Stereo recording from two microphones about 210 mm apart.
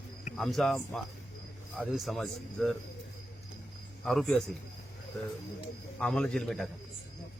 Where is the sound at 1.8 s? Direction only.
Centre (ahead or behind).